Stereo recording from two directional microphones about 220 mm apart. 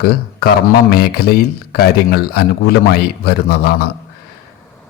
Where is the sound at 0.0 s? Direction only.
45° left (ahead or behind).